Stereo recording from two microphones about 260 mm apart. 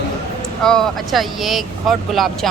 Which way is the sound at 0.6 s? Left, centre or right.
Centre.